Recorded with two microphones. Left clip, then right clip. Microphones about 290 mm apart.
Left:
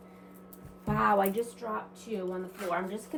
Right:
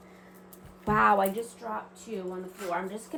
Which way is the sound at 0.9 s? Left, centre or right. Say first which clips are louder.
Right 5 dB; centre.